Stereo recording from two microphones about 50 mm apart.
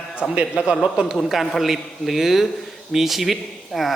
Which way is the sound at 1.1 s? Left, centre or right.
Centre.